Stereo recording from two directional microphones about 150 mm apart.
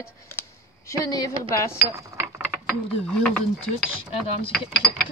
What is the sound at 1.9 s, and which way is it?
Speech, 20° right (ahead or behind).